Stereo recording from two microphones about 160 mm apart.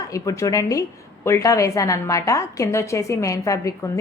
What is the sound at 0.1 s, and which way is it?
A woman's voice, 20° left (ahead or behind).